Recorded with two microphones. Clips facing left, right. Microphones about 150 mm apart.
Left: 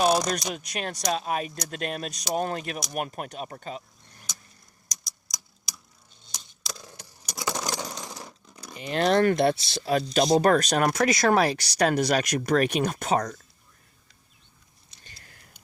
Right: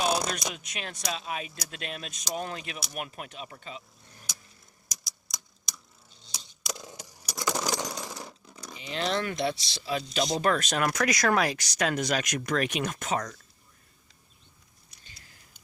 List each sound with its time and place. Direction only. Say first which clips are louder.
0.3 s speech: left 5 dB; 40° left (ahead or behind)
4.9 s typewriter: even; centre (ahead or behind)
6.7 s a sound: right 3 dB; 15° right (ahead or behind)
7.7 s sewing machine: right 1 dB; 10° right (ahead or behind)
8.2 s coin: right 1 dB; centre (ahead or behind)
8.7 s speech: left 8 dB; 55° left (ahead or behind); by 13.4 s 35° left (ahead or behind)
15.0 s a sound: left 4 dB; 55° left (ahead or behind)